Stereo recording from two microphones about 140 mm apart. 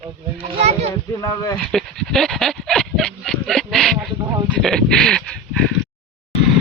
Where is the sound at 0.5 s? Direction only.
50° right (ahead or behind).